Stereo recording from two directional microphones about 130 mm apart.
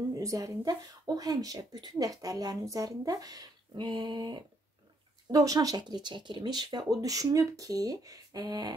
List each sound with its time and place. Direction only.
0.1 s speech: 25° right (ahead or behind)